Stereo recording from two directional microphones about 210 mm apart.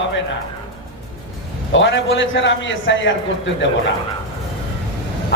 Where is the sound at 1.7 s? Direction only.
60° left (ahead or behind).